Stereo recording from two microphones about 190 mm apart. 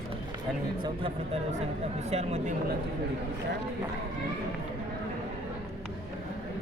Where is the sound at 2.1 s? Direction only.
35° right (ahead or behind).